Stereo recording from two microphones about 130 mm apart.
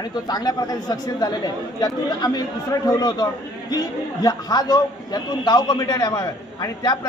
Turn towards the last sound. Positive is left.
turn(degrees=30)  # may be behind; listen again after turning